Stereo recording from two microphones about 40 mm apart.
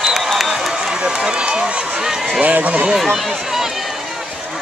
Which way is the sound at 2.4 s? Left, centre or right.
Right.